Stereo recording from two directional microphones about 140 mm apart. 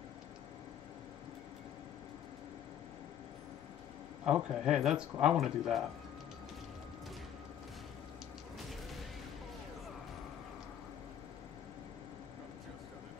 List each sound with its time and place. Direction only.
4.2 s speech: 5° right (ahead or behind)